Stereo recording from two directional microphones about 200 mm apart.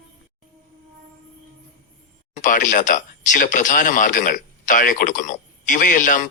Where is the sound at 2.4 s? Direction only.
40° left (ahead or behind).